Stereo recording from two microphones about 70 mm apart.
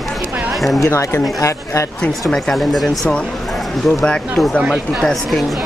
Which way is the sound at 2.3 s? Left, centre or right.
Centre.